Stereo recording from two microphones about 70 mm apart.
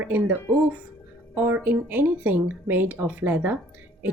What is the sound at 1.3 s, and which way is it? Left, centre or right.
A woman's voice, right.